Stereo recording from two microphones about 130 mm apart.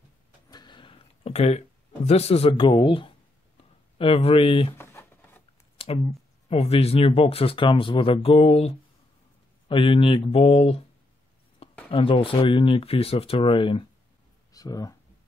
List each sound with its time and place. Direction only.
0.5 s a sound: 35° left (ahead or behind)
4.0 s speech: 45° left (ahead or behind)
4.7 s a sound: 20° left (ahead or behind)
5.8 s clicking: 45° left (ahead or behind)
6.5 s speech: 50° left (ahead or behind)
11.9 s speech: 45° left (ahead or behind)
14.5 s speech: 25° left (ahead or behind)